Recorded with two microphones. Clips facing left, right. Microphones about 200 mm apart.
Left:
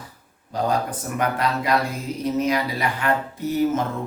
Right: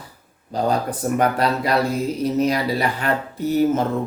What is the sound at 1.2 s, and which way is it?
Speech, 35° right (ahead or behind).